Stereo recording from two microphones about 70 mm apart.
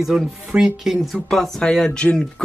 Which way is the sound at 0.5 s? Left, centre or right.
Centre.